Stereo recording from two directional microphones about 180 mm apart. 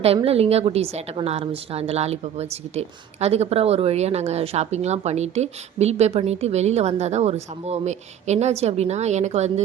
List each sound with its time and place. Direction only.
0.0 s a woman's voice: 35° right (ahead or behind)